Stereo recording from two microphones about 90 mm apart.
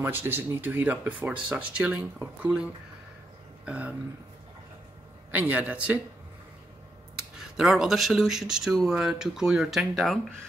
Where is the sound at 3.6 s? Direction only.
15° right (ahead or behind).